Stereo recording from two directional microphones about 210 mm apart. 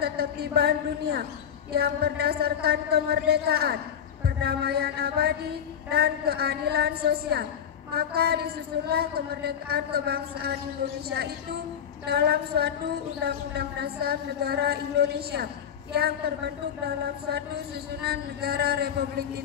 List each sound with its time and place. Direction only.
0.0 s a man's voice: 50° right (ahead or behind)